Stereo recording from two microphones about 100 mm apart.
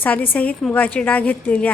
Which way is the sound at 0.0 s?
15° left (ahead or behind).